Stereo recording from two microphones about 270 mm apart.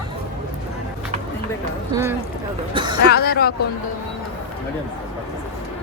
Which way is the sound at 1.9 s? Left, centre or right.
Centre.